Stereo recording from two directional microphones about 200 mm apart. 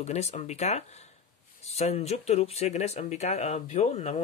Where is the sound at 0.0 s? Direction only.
35° left (ahead or behind).